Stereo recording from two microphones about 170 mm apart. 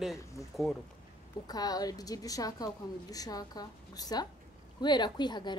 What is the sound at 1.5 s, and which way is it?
Speech, 20° left (ahead or behind).